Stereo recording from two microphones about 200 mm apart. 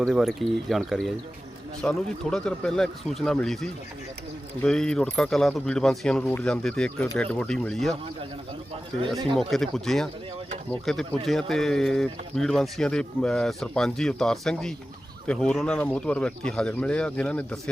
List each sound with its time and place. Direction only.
0.0 s speech: centre (ahead or behind)
9.1 s speech: 25° right (ahead or behind)
9.4 s speech: centre (ahead or behind)